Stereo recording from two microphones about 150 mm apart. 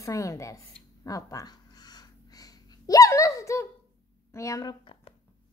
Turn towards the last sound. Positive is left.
turn(degrees=35)  # may be behind; listen again after turning